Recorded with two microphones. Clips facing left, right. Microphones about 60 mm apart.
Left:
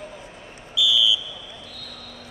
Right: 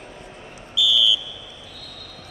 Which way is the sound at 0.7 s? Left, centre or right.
Centre.